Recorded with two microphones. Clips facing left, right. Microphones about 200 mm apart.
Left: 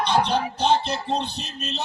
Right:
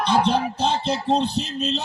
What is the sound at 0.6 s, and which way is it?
A man's voice, 55° right (ahead or behind).